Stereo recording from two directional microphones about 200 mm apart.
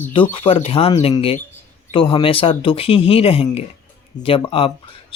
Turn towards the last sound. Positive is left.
turn(degrees=30)  # may be behind; listen again after turning